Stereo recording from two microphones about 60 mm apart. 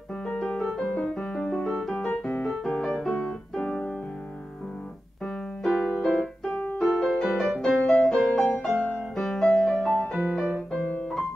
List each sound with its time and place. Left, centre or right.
0.4 s music: centre
1.1 s piano: centre
5.2 s piano: centre
6.5 s music: left
6.8 s music: centre
10.1 s music: centre